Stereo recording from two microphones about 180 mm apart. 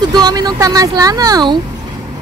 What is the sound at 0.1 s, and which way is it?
Speech, 20° right (ahead or behind).